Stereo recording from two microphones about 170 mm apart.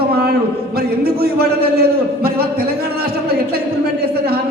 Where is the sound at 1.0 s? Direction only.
65° right (ahead or behind).